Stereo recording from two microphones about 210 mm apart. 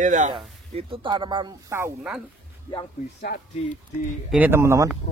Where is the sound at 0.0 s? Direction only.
35° right (ahead or behind).